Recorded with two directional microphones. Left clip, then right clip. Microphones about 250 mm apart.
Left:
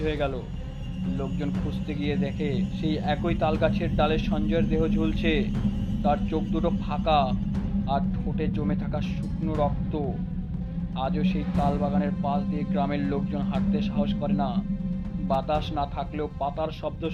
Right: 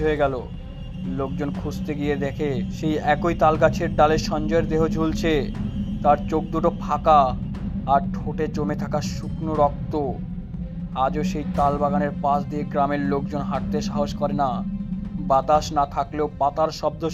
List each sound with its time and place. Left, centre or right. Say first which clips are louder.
0.0 s speech: right 7 dB; centre
1.9 s speech: right 6 dB; centre